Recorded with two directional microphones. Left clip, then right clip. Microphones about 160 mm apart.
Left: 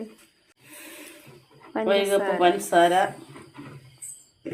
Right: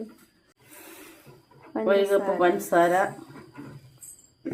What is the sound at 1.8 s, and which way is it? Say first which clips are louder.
A woman's voice: even; 90° right.